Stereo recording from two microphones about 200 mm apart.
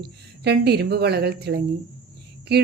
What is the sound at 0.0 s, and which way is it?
A woman's voice, 55° right (ahead or behind).